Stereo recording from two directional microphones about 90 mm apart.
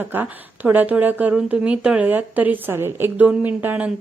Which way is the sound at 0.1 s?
20° right (ahead or behind).